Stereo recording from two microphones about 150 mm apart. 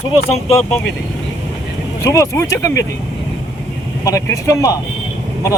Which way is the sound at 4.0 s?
20° left (ahead or behind).